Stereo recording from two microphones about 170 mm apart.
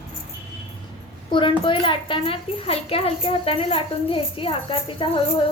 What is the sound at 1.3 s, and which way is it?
A child's voice, 30° left (ahead or behind).